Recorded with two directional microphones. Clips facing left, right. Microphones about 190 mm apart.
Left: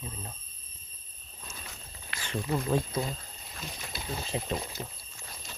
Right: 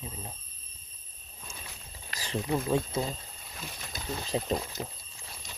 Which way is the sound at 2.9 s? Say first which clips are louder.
Right 1 dB; 25° right (ahead or behind).